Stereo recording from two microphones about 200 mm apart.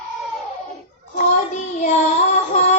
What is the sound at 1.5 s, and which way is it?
Child singing, 35° left (ahead or behind).